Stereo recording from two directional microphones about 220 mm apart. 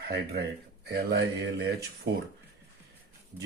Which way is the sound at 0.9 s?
50° right (ahead or behind).